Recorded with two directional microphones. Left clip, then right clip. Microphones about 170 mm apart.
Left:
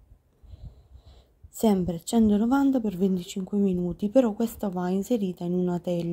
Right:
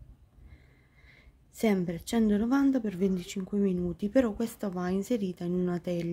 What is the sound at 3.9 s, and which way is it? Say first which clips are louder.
Speech: left 6 dB; 35° right (ahead or behind).